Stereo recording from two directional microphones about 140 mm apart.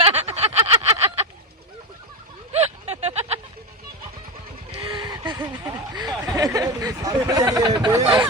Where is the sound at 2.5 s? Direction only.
50° right (ahead or behind).